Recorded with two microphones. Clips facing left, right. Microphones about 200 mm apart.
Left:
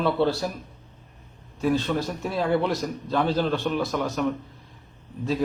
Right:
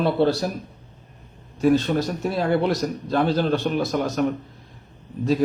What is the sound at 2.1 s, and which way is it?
A man's voice, 35° right (ahead or behind).